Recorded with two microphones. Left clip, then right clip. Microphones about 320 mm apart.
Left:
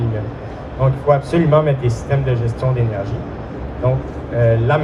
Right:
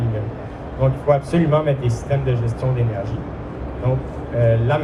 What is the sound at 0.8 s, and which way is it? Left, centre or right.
A man's voice, left.